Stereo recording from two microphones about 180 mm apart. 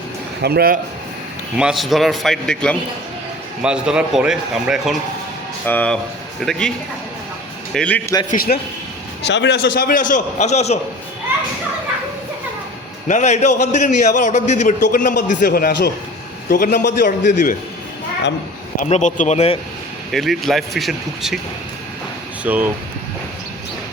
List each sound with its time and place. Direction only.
0.4 s a man's voice: 60° right (ahead or behind)
1.5 s a man's voice: 5° right (ahead or behind)
5.6 s a man's voice: 10° left (ahead or behind)
8.3 s a man's voice: 55° left (ahead or behind)
9.2 s a man's voice: 75° left (ahead or behind); by 10.8 s 40° left (ahead or behind)
13.1 s a man's voice: 40° left (ahead or behind)
15.4 s a man's voice: 60° left (ahead or behind)
18.8 s a man's voice: 40° left (ahead or behind)
20.1 s a man's voice: centre (ahead or behind)
22.4 s speech: 10° right (ahead or behind)